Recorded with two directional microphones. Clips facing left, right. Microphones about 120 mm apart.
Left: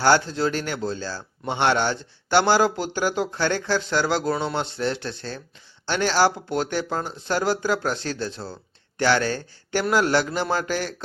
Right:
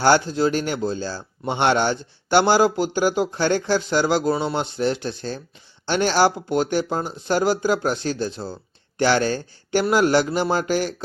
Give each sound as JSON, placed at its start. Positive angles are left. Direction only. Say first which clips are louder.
{"t": 0.0, "sound": "a man's voice", "louder": "right 2 dB", "side_deg": -15}